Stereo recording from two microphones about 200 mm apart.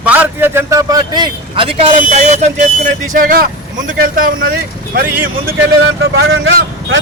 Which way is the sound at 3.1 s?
45° right (ahead or behind).